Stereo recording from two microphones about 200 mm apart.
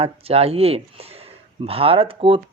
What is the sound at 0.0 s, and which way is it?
Speech, 30° right (ahead or behind).